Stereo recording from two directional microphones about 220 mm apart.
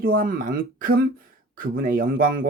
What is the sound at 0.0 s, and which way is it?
Speech, 40° right (ahead or behind).